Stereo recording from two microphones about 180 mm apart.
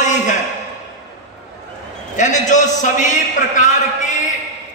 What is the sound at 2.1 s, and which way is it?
A man's voice, 40° left (ahead or behind).